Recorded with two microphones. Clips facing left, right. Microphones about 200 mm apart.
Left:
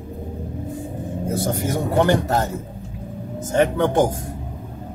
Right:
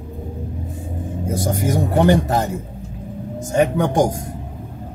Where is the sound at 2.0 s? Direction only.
15° right (ahead or behind).